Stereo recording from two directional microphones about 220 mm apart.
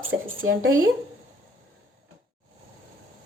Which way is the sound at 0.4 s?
65° right (ahead or behind).